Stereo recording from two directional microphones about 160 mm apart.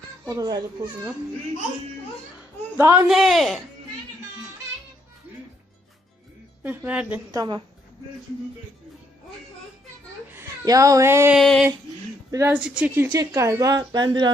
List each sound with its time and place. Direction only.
0.3 s a woman's voice: 25° right (ahead or behind)
2.7 s speech: 15° right (ahead or behind)
3.1 s a man's voice: centre (ahead or behind)
6.6 s speech: 10° right (ahead or behind)
7.3 s a woman's voice: 25° right (ahead or behind)
10.3 s a child's voice: 20° right (ahead or behind)
11.3 s a man's voice: 5° left (ahead or behind)
12.3 s speech: 20° right (ahead or behind)
12.5 s speech: 5° right (ahead or behind)
13.1 s a woman's voice: 20° right (ahead or behind)